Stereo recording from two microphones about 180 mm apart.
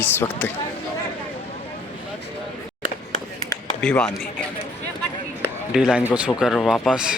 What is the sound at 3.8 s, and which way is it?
Speech, 5° left (ahead or behind).